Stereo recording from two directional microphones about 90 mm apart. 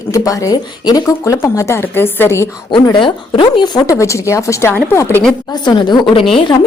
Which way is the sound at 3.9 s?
35° left (ahead or behind).